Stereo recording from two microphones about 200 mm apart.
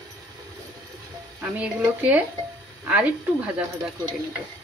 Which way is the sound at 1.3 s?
5° right (ahead or behind).